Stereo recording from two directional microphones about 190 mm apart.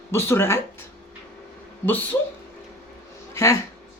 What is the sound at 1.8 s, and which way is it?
Speech, 10° left (ahead or behind).